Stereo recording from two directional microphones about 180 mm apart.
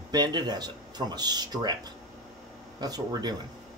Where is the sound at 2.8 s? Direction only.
20° right (ahead or behind).